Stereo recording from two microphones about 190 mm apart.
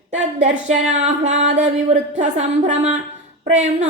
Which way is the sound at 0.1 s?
35° right (ahead or behind).